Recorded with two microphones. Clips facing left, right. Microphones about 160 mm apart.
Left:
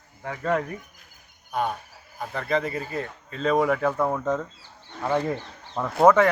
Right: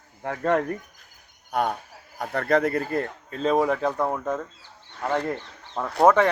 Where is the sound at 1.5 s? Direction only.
75° right (ahead or behind); by 3.1 s 55° right (ahead or behind).